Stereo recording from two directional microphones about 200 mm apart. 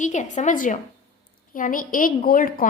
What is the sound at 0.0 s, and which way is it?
A woman's voice, 40° left (ahead or behind).